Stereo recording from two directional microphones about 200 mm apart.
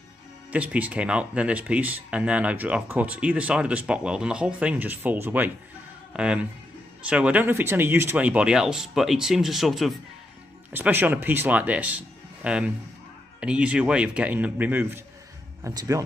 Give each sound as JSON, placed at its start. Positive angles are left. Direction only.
{"t": 0.5, "sound": "speech", "side_deg": -5}